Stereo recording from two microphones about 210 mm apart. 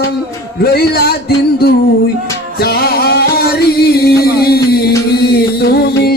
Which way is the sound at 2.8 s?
50° left (ahead or behind).